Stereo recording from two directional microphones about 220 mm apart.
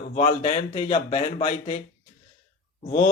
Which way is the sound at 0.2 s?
30° left (ahead or behind).